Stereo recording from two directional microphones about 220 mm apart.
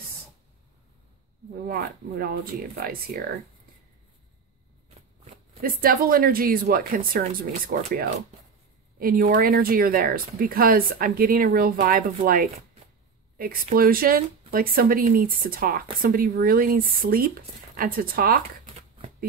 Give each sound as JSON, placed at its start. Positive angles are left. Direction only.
{"t": 1.7, "sound": "speech", "side_deg": -45}
{"t": 5.6, "sound": "speech", "side_deg": -40}